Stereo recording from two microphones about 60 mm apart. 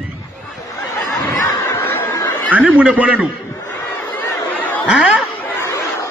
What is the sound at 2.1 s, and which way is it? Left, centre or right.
Snicker, left.